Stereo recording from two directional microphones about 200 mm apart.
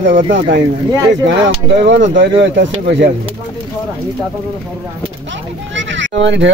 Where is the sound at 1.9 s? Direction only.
60° right (ahead or behind).